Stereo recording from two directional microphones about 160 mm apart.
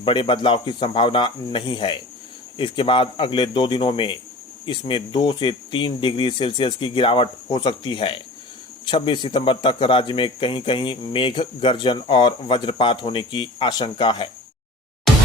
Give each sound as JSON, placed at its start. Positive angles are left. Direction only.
{"t": 0.0, "sound": "speech", "side_deg": 30}